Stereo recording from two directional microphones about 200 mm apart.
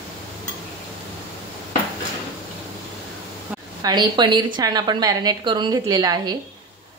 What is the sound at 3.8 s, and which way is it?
A woman's voice, 20° right (ahead or behind).